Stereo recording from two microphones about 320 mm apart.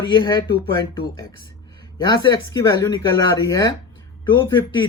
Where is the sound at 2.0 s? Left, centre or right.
Centre.